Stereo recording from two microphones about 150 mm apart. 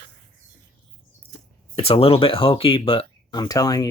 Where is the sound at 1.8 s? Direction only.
40° left (ahead or behind); by 3.9 s 25° left (ahead or behind).